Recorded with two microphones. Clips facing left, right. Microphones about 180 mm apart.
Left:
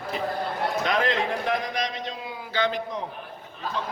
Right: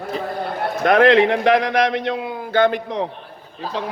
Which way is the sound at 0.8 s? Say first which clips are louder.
Right 14 dB; 65° right (ahead or behind).